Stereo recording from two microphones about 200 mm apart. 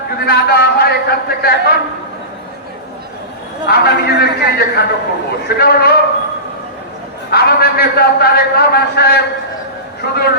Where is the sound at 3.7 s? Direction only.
50° left (ahead or behind).